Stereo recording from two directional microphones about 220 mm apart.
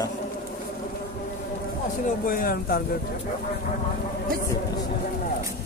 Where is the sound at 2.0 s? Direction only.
40° left (ahead or behind).